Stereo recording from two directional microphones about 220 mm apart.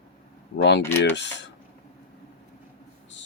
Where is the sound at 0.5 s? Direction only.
50° left (ahead or behind).